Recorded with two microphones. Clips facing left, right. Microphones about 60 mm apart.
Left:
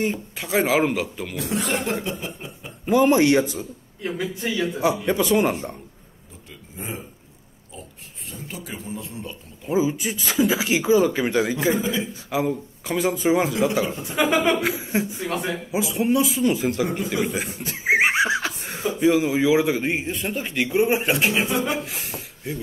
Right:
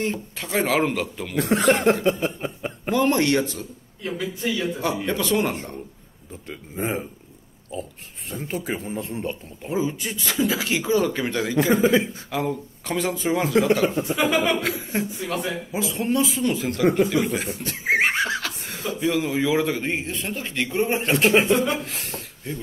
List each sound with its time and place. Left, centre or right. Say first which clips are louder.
0.0 s speech: left 2 dB; centre
1.3 s speech: right 7 dB; right
2.0 s speech: right 8 dB; right
2.9 s a man's voice: left 4 dB; centre
6.5 s speech: right 7 dB; right
8.3 s a man's voice: right 7 dB; right
9.7 s a man's voice: left 3 dB; centre
21.3 s speech: right 5 dB; right
21.5 s a man's voice: right 1 dB; centre